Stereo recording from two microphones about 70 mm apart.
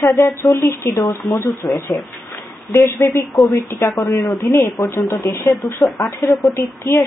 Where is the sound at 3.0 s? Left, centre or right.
Left.